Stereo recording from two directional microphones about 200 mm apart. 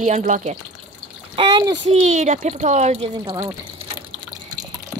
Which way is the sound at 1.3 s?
25° right (ahead or behind).